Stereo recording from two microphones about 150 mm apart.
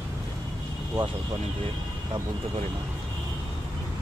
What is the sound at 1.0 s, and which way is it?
Speech, 30° right (ahead or behind).